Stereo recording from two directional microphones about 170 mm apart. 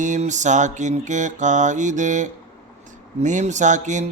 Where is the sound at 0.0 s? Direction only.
45° right (ahead or behind).